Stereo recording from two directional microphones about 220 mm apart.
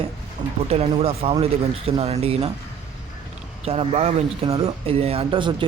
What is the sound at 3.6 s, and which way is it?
Speech, 30° right (ahead or behind).